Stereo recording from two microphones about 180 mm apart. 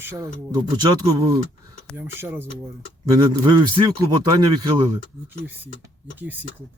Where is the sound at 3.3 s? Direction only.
25° right (ahead or behind).